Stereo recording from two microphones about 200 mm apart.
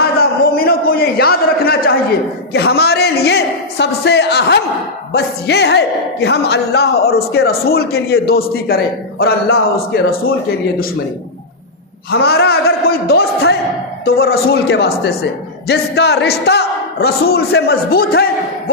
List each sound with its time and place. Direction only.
0.2 s a sound: 50° left (ahead or behind)
2.5 s a man's voice: 55° left (ahead or behind)
12.1 s speech: 50° left (ahead or behind)